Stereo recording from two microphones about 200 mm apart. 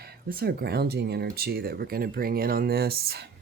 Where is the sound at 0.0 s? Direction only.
50° right (ahead or behind).